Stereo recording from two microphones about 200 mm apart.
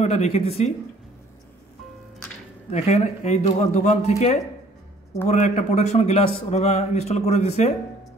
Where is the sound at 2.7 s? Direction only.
30° left (ahead or behind).